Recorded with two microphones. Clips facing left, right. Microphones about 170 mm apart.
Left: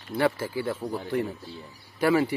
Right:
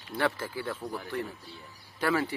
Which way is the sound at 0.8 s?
25° left (ahead or behind).